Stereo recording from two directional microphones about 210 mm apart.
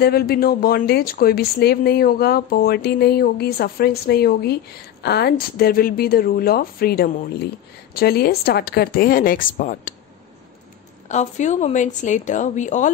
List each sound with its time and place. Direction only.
0.0 s speech: 45° left (ahead or behind)
11.1 s a woman's voice: 35° left (ahead or behind)